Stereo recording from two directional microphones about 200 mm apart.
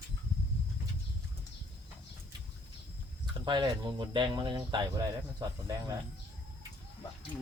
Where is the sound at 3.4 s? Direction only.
20° right (ahead or behind).